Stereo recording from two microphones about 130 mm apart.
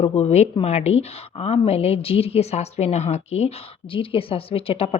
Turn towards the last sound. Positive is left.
turn(degrees=45)  # may be behind; listen again after turning